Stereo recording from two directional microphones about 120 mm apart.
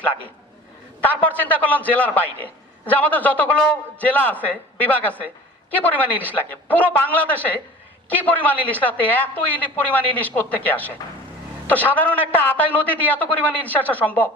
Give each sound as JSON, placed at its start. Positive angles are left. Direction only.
{"t": 1.0, "sound": "a man's voice", "side_deg": 10}
{"t": 6.2, "sound": "a man's voice", "side_deg": 15}